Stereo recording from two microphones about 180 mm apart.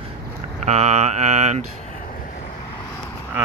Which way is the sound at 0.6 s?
40° right (ahead or behind).